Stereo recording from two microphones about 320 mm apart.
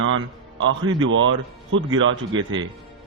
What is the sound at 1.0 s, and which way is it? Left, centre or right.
Speech, right.